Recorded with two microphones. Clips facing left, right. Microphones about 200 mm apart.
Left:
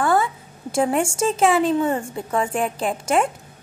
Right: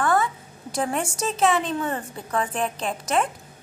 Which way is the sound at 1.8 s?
25° left (ahead or behind).